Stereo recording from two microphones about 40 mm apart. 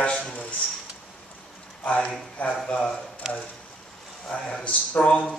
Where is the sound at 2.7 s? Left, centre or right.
Left.